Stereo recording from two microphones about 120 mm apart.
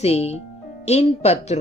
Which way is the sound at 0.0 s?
65° left (ahead or behind).